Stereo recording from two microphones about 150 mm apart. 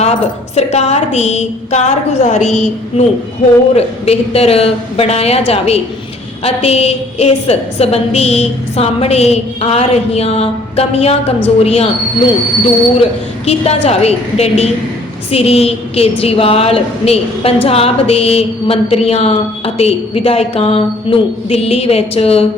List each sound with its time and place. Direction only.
0.0 s a woman's voice: 45° left (ahead or behind)
3.8 s a woman's voice: 45° left (ahead or behind)
13.0 s a woman's voice: 45° left (ahead or behind)